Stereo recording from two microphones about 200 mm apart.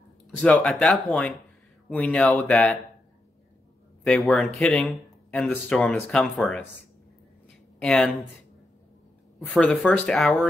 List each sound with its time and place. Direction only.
0.4 s speech: 5° left (ahead or behind)
4.0 s speech: centre (ahead or behind)
7.8 s speech: centre (ahead or behind)
9.5 s speech: 5° left (ahead or behind)